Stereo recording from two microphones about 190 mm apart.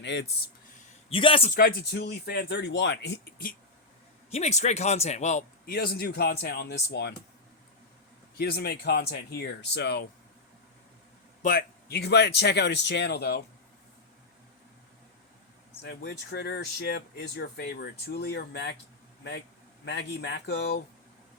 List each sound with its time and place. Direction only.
0.0 s speech: 65° left (ahead or behind)
1.1 s a man's voice: 30° left (ahead or behind)
1.5 s speech: 50° left (ahead or behind)
4.3 s a man's voice: 35° left (ahead or behind); by 7.1 s 60° left (ahead or behind)
8.4 s speech: 55° left (ahead or behind)
11.4 s speech: 50° left (ahead or behind)
15.8 s speech: 60° left (ahead or behind)
19.8 s speech: 65° left (ahead or behind)